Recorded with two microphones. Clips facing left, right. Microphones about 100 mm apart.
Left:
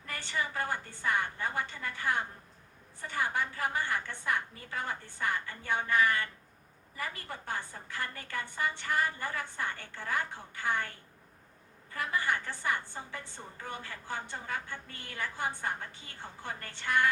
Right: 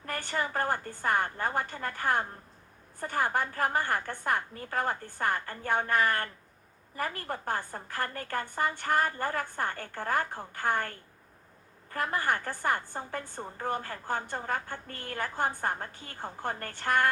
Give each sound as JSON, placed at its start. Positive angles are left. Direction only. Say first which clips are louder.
{"t": 0.0, "sound": "a woman's voice", "louder": "right 4 dB", "side_deg": -50}